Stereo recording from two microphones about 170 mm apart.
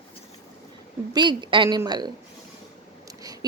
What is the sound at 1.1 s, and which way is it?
Speech, 25° right (ahead or behind).